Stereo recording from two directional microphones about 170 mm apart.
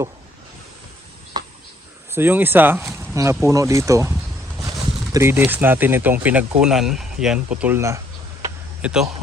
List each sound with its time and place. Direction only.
2.1 s speech: 10° right (ahead or behind)
5.1 s speech: 15° right (ahead or behind)